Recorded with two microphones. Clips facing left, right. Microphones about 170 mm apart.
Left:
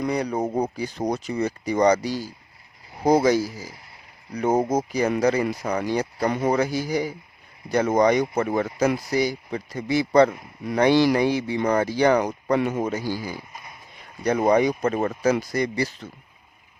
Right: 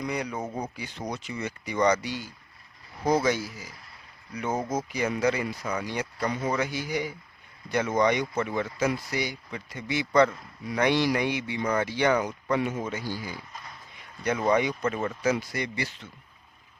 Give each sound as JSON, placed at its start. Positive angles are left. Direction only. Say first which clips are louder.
{"t": 0.1, "sound": "speech", "louder": "left 7 dB", "side_deg": 35}
{"t": 12.5, "sound": "a man's voice", "louder": "left 4 dB", "side_deg": 65}
{"t": 12.8, "sound": "speech", "louder": "left 7 dB", "side_deg": 40}
{"t": 13.5, "sound": "a sound", "louder": "left 1 dB", "side_deg": 10}
{"t": 14.4, "sound": "speech", "louder": "left 5 dB", "side_deg": 40}